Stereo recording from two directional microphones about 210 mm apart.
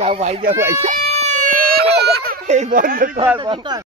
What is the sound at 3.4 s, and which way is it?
Speech, 20° right (ahead or behind).